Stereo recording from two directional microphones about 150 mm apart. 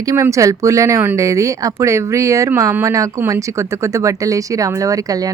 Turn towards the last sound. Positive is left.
turn(degrees=-25)  # may be behind; listen again after turning